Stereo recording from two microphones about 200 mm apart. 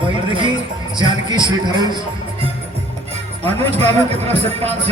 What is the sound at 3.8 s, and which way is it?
Music, 30° right (ahead or behind).